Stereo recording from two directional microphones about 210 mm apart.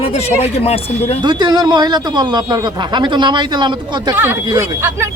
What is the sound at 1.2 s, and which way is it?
A man's voice, 20° right (ahead or behind).